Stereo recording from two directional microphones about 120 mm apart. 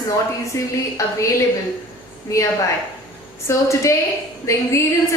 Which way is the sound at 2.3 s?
25° left (ahead or behind).